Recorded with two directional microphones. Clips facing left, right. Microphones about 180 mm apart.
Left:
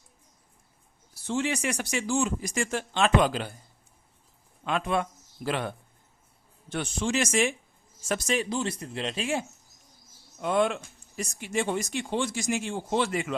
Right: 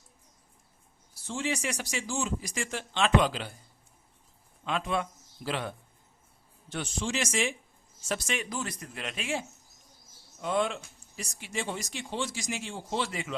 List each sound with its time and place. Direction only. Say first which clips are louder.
1.3 s speech: left 4 dB; 60° left (ahead or behind)
4.6 s speech: left 3 dB; 55° left (ahead or behind)
8.3 s speech: left 6 dB; 30° left (ahead or behind)
10.4 s speech: left 4 dB; 60° left (ahead or behind)